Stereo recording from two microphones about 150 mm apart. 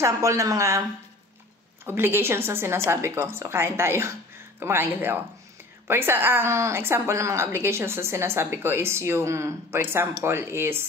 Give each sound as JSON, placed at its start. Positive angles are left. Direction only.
{"t": 0.0, "sound": "a woman's voice", "side_deg": -20}
{"t": 1.9, "sound": "a woman's voice", "side_deg": -15}